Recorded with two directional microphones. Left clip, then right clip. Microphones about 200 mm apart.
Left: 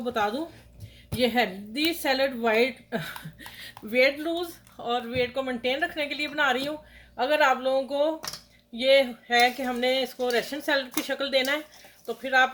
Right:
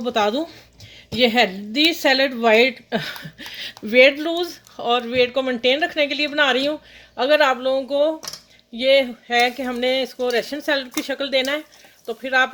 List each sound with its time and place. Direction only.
0.0 s a woman's voice: 45° right (ahead or behind)